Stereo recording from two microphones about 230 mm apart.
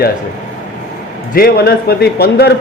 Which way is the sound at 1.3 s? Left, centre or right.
Left.